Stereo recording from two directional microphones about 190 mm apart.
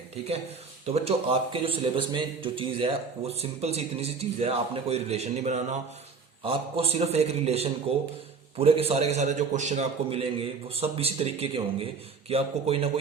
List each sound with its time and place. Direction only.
0.9 s speech: 35° right (ahead or behind)